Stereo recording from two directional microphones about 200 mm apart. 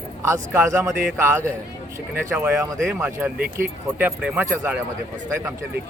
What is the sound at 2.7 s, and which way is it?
Speech, centre (ahead or behind).